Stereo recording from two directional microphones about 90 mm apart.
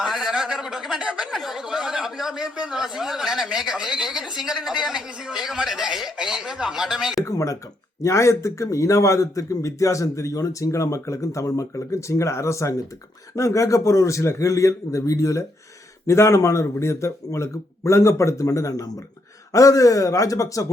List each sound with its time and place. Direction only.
0.0 s speech: 5° right (ahead or behind)
7.3 s a man's voice: 35° left (ahead or behind)